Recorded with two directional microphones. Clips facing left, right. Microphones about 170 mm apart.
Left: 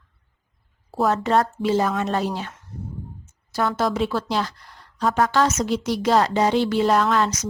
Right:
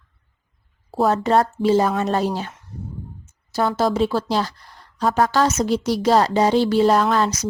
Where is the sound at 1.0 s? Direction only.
30° right (ahead or behind).